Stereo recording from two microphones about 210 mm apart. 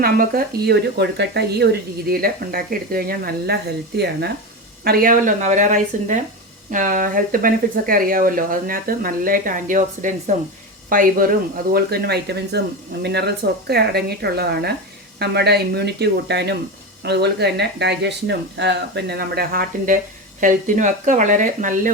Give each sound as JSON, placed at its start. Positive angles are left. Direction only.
{"t": 0.0, "sound": "speech", "side_deg": -45}